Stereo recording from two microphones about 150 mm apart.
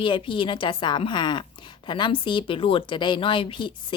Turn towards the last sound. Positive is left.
turn(degrees=35)  # may be behind; listen again after turning